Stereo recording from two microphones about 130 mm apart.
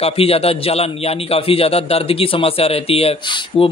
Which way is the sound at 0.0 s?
50° left (ahead or behind).